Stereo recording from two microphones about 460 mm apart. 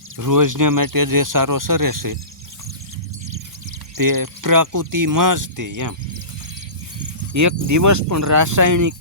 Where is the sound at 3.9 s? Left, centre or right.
Right.